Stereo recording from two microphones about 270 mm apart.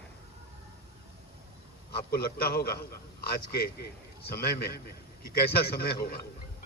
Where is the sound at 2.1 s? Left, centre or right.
Left.